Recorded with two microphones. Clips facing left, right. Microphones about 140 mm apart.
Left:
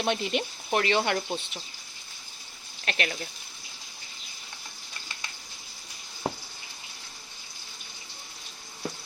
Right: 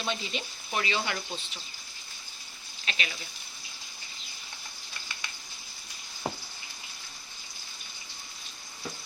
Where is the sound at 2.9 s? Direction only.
55° left (ahead or behind).